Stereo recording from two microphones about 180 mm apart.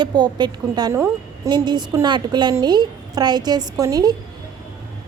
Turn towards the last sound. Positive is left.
turn(degrees=-20)  # may be behind; listen again after turning